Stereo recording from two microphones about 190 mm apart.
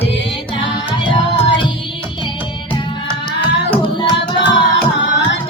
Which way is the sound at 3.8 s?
25° left (ahead or behind).